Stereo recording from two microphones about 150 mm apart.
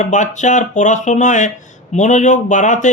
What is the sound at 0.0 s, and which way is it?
Speech, 55° left (ahead or behind).